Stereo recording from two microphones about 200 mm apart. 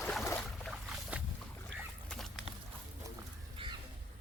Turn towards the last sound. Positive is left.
turn(degrees=-25)  # may be behind; listen again after turning